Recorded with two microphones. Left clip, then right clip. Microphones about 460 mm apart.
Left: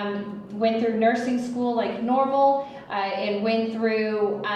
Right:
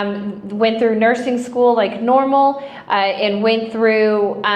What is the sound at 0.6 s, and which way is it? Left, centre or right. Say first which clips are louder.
Speech: right 7 dB; right.